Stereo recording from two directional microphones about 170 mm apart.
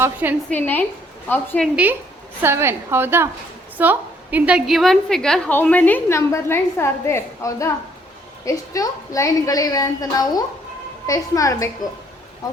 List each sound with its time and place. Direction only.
0.0 s a woman's voice: 10° right (ahead or behind)
0.5 s a woman's voice: 10° left (ahead or behind)
1.6 s a woman's voice: 10° right (ahead or behind); by 11.7 s 20° left (ahead or behind)